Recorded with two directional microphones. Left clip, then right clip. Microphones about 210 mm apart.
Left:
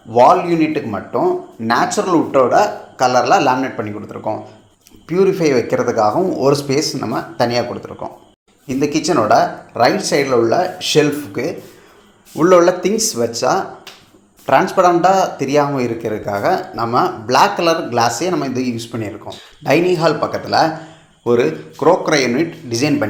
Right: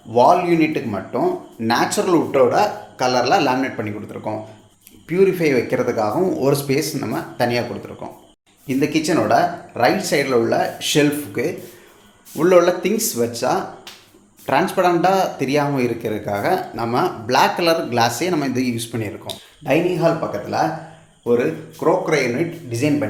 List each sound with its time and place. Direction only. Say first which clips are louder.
0.1 s speech: left 3 dB; 5° left (ahead or behind)
19.6 s speech: left 4 dB; 30° left (ahead or behind)